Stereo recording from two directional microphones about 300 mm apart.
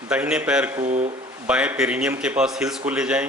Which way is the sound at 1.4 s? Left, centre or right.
Centre.